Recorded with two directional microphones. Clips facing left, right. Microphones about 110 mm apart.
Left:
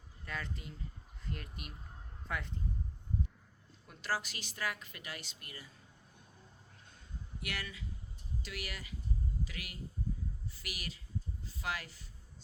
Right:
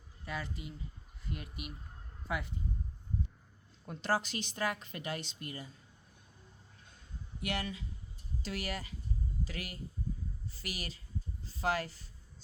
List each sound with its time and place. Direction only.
0.3 s speech: 10° right (ahead or behind)
3.8 s a woman's voice: 25° right (ahead or behind)
7.4 s a woman's voice: 25° right (ahead or behind)